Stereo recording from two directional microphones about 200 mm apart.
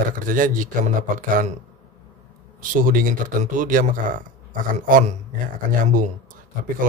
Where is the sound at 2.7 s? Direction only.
45° right (ahead or behind).